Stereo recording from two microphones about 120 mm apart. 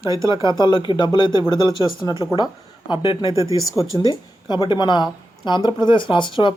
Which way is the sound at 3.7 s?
30° left (ahead or behind).